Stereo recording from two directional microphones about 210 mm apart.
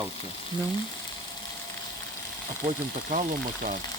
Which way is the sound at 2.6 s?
35° right (ahead or behind).